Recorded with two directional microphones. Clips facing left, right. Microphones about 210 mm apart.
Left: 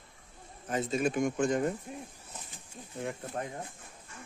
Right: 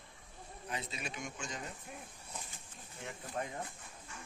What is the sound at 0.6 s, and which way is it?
Speech, 45° left (ahead or behind).